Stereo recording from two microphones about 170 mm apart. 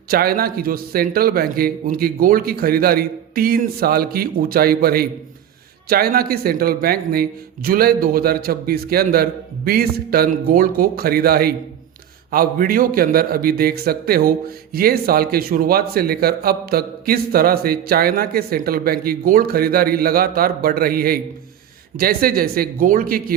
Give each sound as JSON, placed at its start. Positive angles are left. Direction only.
{"t": 0.1, "sound": "a man's voice", "side_deg": -60}